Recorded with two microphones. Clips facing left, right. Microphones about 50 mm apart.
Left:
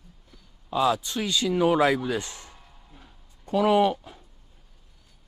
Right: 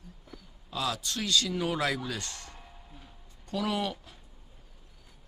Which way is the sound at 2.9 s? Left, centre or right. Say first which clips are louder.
Even; centre.